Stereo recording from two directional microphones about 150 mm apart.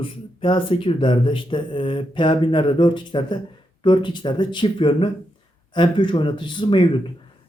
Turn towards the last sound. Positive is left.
turn(degrees=30)  # may be behind; listen again after turning